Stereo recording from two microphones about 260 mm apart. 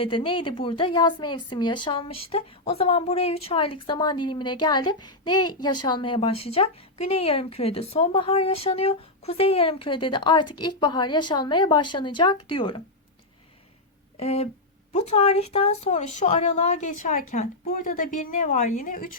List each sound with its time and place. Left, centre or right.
0.0 s a woman's voice: centre
14.2 s a woman's voice: left